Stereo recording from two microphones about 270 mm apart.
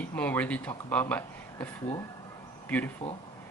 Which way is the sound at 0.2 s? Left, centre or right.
Centre.